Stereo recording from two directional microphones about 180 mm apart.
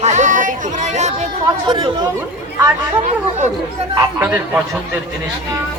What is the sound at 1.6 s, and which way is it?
Speech, 25° right (ahead or behind).